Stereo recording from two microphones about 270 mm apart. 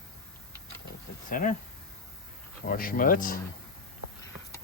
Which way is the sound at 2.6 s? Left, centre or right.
Left.